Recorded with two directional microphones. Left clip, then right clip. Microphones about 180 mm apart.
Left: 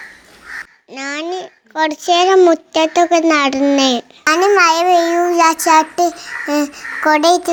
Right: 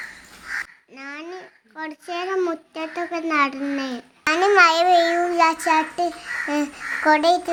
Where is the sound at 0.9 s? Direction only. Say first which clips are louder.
Left 12 dB; 35° left (ahead or behind).